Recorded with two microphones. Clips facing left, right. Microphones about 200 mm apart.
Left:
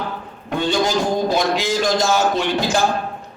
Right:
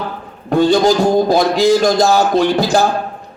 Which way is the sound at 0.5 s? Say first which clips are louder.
Right 8 dB; 40° right (ahead or behind).